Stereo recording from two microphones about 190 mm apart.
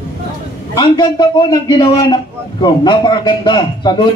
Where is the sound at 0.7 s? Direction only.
25° left (ahead or behind).